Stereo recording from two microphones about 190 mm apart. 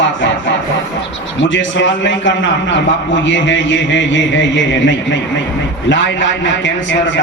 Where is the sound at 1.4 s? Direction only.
75° left (ahead or behind).